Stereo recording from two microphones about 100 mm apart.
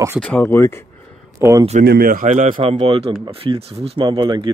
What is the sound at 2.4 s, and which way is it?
Speech, 80° right.